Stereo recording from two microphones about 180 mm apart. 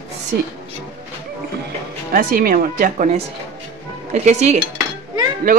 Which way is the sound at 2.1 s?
50° right (ahead or behind).